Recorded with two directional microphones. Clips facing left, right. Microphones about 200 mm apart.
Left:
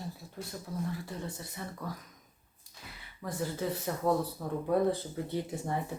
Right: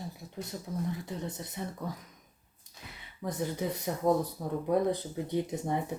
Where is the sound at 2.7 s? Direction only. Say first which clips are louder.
Right 1 dB; 20° right (ahead or behind).